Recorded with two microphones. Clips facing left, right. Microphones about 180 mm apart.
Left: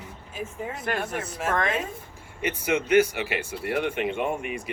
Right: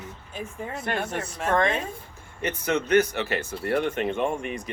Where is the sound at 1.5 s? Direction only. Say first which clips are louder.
Right 4 dB; 30° right (ahead or behind).